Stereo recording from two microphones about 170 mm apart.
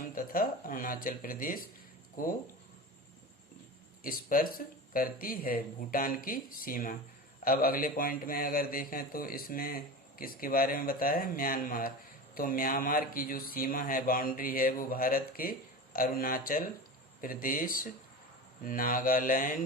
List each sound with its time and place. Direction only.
0.1 s speech: 55° left (ahead or behind)
4.0 s speech: 55° left (ahead or behind)